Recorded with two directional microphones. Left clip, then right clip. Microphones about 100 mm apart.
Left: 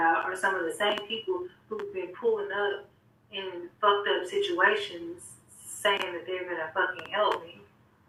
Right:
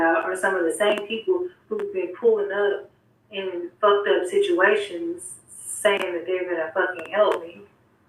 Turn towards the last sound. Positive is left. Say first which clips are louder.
# right 7 dB
turn(degrees=40)  # may be behind; listen again after turning